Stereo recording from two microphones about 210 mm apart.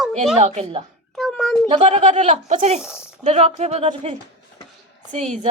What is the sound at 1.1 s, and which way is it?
Speech, centre (ahead or behind).